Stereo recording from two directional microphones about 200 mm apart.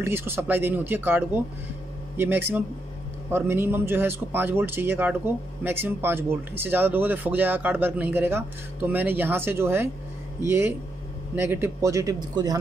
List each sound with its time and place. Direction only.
0.0 s speech: 10° right (ahead or behind)